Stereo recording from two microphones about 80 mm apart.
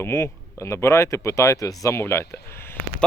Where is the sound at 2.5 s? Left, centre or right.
Left.